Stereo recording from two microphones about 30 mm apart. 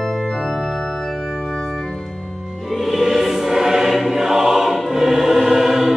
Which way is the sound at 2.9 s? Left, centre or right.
Centre.